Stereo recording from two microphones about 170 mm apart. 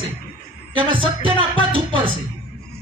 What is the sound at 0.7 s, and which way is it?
A man's voice, 30° right (ahead or behind).